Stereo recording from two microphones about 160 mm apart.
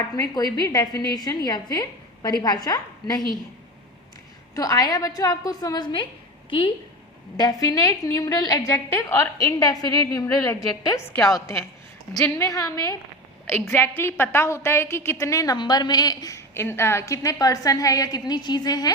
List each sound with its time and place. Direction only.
0.2 s a woman's voice: 25° left (ahead or behind)
4.5 s a woman's voice: 20° left (ahead or behind)
7.3 s a woman's voice: 25° left (ahead or behind)
11.2 s a woman's voice: centre (ahead or behind)
12.1 s a woman's voice: 20° left (ahead or behind)